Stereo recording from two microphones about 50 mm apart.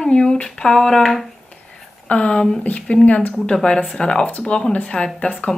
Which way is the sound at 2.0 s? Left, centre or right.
Left.